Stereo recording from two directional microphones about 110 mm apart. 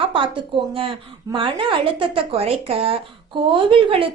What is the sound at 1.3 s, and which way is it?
A woman's voice, 50° right (ahead or behind).